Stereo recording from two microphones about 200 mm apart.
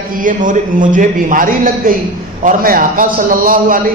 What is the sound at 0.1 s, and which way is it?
A man's voice, 40° right (ahead or behind).